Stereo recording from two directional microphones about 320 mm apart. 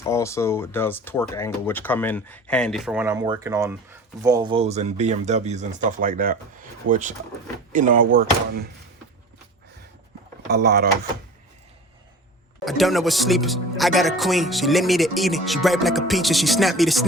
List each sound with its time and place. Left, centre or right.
0.0 s speech: centre; by 8.0 s right
10.5 s speech: right
12.6 s speech: centre